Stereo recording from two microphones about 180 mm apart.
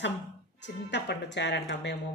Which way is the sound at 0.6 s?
75° left (ahead or behind).